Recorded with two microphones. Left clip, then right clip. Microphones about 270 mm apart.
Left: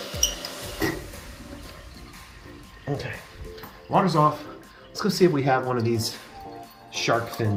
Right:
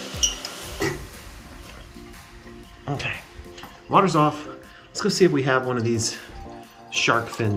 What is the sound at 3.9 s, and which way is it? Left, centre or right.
Speech, centre.